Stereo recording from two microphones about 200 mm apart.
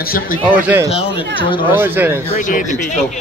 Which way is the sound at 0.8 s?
25° left (ahead or behind).